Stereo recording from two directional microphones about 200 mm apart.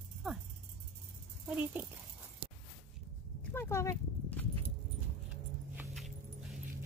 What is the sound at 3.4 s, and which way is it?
Horse, 10° left (ahead or behind).